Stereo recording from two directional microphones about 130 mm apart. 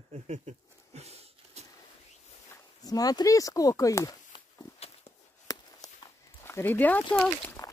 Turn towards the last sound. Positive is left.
turn(degrees=10)  # may be behind; listen again after turning